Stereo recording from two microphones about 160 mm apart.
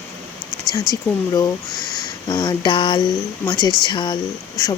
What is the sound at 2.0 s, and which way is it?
Speech, 25° left (ahead or behind).